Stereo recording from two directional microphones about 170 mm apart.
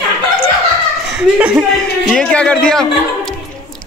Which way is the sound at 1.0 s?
5° right (ahead or behind).